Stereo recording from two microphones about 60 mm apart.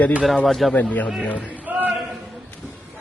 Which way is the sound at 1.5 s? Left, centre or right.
Right.